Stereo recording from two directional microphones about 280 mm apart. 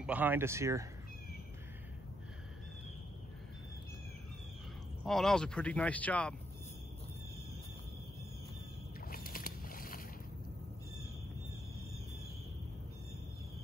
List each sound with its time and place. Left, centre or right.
0.0 s speech: centre
5.0 s speech: centre
9.0 s boat: left